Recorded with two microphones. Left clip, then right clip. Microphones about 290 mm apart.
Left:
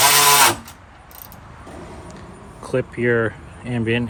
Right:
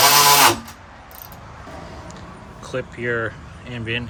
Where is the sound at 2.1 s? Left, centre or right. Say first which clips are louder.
Right 1 dB; left.